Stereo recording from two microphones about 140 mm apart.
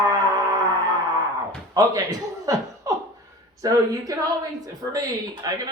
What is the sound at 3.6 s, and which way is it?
Speech, 25° right (ahead or behind).